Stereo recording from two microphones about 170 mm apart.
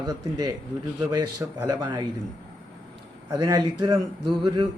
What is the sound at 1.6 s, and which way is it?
Speech, 20° right (ahead or behind).